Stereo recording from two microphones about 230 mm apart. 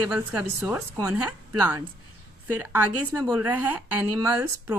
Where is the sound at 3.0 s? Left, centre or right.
Centre.